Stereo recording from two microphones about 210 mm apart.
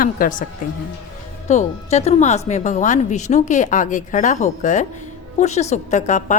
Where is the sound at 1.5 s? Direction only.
35° left (ahead or behind).